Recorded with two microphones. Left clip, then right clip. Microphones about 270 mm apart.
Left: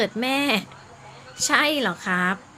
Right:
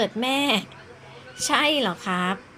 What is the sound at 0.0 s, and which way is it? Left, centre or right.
Speech, centre.